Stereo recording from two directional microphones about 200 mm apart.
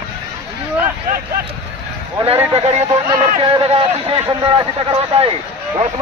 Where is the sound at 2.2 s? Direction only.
30° right (ahead or behind).